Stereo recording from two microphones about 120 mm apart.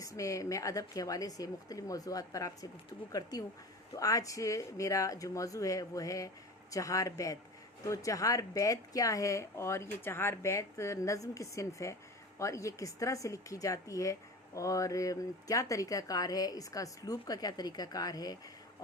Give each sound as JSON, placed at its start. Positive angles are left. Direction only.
{"t": 0.0, "sound": "speech", "side_deg": 30}